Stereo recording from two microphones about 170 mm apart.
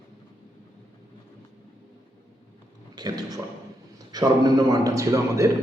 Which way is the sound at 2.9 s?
25° right (ahead or behind).